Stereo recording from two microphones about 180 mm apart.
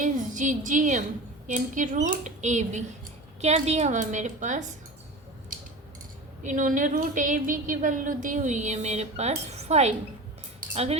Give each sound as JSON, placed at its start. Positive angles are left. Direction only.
{"t": 0.0, "sound": "a woman's voice", "side_deg": -45}
{"t": 5.5, "sound": "a sound", "side_deg": -50}
{"t": 6.4, "sound": "a woman's voice", "side_deg": -45}